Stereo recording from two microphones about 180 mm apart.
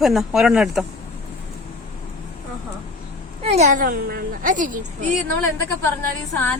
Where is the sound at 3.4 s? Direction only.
40° right (ahead or behind).